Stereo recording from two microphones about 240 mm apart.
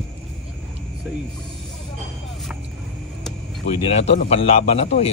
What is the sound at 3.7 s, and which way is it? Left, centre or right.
A man's voice, left.